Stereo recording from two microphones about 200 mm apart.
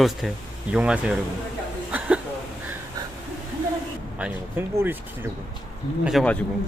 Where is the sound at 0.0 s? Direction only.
Centre (ahead or behind).